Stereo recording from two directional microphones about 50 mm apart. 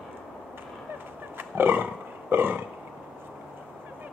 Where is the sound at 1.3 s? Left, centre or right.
Right.